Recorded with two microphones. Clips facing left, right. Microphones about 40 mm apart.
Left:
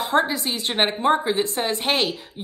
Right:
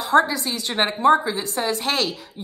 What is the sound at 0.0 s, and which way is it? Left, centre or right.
Speech, centre.